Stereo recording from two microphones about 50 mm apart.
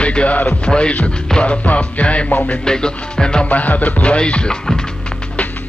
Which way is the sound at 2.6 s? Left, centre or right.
Centre.